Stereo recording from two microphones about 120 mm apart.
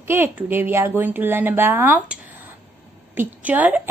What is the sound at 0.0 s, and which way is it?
A woman's voice, 20° right (ahead or behind).